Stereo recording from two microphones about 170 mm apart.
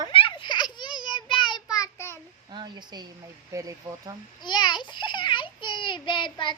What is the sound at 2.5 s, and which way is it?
Speech, 25° right (ahead or behind).